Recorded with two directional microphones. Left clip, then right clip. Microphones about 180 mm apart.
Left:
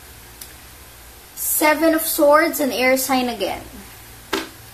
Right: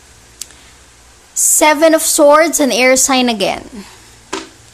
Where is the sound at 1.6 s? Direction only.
50° right (ahead or behind).